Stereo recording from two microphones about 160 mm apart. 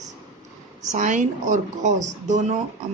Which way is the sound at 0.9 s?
50° right (ahead or behind).